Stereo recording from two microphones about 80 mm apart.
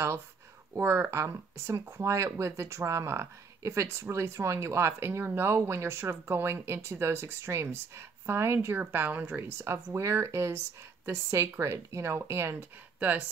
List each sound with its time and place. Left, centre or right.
0.7 s speech: right